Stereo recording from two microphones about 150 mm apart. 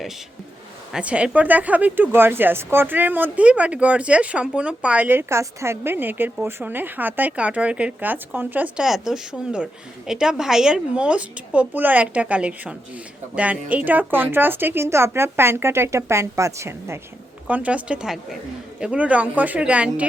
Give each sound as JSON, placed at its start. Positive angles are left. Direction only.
{"t": 0.9, "sound": "speech", "side_deg": -10}